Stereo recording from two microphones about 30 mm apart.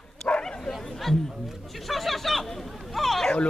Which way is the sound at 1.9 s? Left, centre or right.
Centre.